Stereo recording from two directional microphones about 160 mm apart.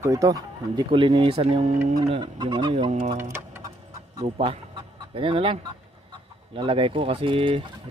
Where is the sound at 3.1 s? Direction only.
15° right (ahead or behind).